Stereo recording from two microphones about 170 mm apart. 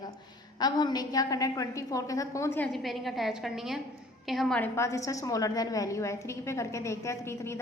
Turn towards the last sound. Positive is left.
turn(degrees=15)  # may be behind; listen again after turning